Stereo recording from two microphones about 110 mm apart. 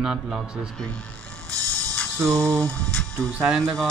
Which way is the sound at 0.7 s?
10° left (ahead or behind).